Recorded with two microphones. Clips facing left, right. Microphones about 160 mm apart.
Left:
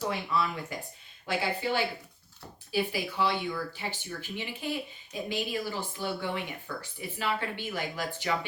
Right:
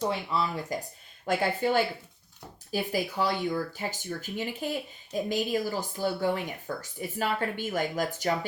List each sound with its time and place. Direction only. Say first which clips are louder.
0.0 s speech: right 1 dB; 30° right (ahead or behind)
1.2 s speech: right 4 dB; 45° right (ahead or behind)